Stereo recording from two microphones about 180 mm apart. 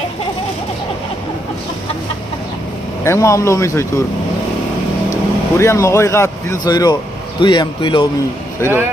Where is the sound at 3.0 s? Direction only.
15° left (ahead or behind).